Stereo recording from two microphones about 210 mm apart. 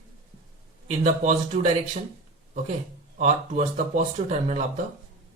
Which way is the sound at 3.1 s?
35° right (ahead or behind).